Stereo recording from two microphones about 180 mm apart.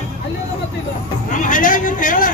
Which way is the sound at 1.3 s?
45° left (ahead or behind).